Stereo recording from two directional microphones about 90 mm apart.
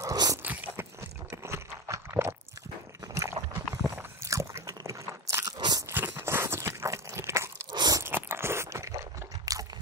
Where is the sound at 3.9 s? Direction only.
30° right (ahead or behind).